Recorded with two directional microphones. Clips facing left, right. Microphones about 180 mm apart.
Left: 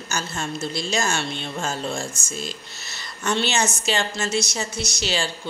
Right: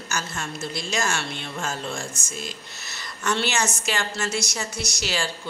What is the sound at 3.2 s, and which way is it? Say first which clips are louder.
A woman's voice: left 2 dB; 25° left (ahead or behind).